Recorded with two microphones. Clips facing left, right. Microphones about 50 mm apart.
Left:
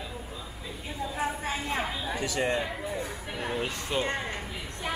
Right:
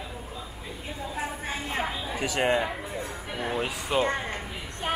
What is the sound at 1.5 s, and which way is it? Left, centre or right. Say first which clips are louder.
A woman's voice: right 1 dB; centre.